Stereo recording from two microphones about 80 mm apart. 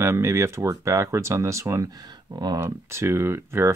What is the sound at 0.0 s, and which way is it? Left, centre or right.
Speech, right.